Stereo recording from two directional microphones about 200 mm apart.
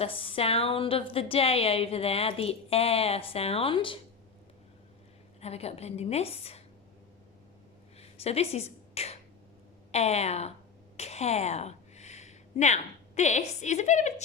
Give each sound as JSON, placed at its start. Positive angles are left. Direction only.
{"t": 0.0, "sound": "a woman's voice", "side_deg": 25}
{"t": 5.4, "sound": "a woman's voice", "side_deg": 30}
{"t": 7.9, "sound": "a sound", "side_deg": 30}
{"t": 9.9, "sound": "a woman's voice", "side_deg": 35}